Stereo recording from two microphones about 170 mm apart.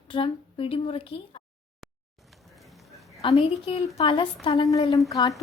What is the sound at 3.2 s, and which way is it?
A woman's voice, 35° left (ahead or behind).